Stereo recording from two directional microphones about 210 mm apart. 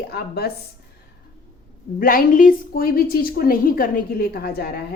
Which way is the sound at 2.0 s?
45° left (ahead or behind).